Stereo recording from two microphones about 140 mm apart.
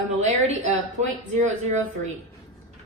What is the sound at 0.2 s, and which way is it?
A woman's voice, 55° right (ahead or behind).